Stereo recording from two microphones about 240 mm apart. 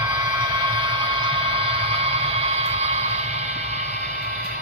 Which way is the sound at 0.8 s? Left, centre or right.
Right.